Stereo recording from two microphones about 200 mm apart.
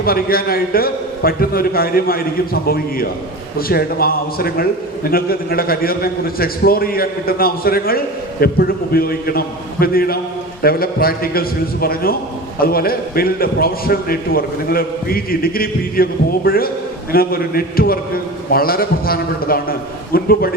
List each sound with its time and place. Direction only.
0.0 s a man's voice: 50° left (ahead or behind)